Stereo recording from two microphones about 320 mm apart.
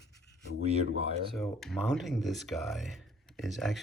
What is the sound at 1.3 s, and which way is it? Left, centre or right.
Speech, centre.